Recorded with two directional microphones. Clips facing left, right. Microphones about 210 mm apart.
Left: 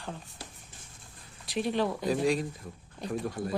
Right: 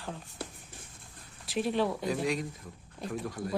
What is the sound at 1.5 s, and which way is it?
Speech, centre (ahead or behind).